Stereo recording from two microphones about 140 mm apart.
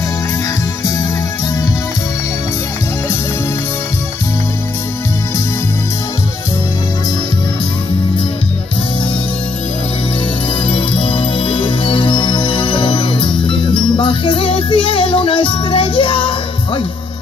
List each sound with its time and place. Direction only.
10.7 s music: 40° left (ahead or behind)